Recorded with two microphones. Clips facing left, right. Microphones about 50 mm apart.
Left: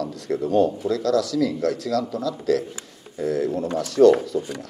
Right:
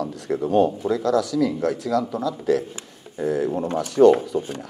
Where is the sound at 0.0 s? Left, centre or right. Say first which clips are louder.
Right 1 dB; centre.